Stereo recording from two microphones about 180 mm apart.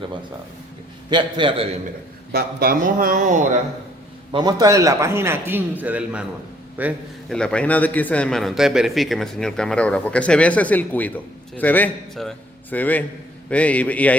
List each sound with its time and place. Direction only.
1.1 s a man's voice: 25° right (ahead or behind)
2.3 s a man's voice: 55° right (ahead or behind)
4.3 s a man's voice: 25° right (ahead or behind)
7.3 s a man's voice: 5° left (ahead or behind)